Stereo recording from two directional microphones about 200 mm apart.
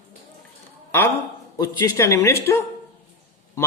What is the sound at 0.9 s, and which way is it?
A man's voice, 10° left (ahead or behind).